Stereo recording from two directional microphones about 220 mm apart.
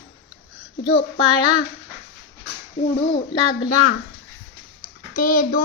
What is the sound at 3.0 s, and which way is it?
Speech, 20° left (ahead or behind).